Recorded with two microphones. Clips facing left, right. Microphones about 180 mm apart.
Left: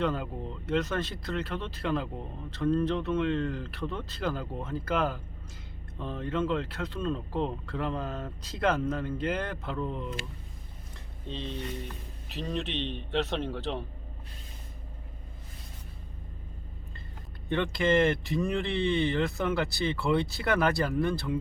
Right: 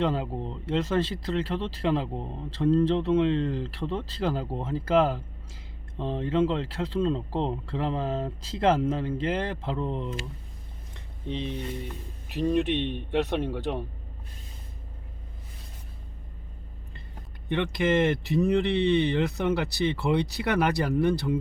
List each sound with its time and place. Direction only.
0.0 s speech: 30° right (ahead or behind)
11.3 s speech: 15° right (ahead or behind)
18.3 s speech: 20° right (ahead or behind)